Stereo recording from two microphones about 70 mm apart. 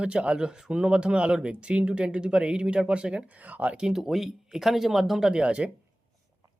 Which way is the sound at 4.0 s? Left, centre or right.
Centre.